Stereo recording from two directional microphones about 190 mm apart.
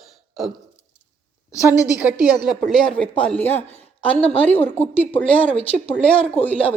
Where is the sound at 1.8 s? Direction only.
10° right (ahead or behind); by 5.4 s 10° left (ahead or behind).